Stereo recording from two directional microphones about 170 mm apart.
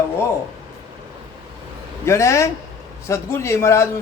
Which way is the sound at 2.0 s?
15° left (ahead or behind).